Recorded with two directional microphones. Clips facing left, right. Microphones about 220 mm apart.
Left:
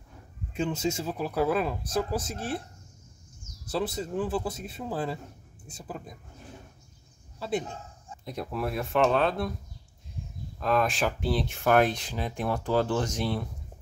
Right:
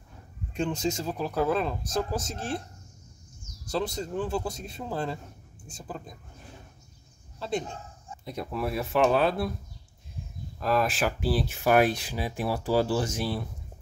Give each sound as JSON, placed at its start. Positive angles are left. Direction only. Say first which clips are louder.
{"t": 0.5, "sound": "speech", "louder": "even", "side_deg": 5}
{"t": 3.6, "sound": "speech", "louder": "even", "side_deg": 5}
{"t": 7.3, "sound": "speech", "louder": "even", "side_deg": 5}
{"t": 10.6, "sound": "speech", "louder": "even", "side_deg": -5}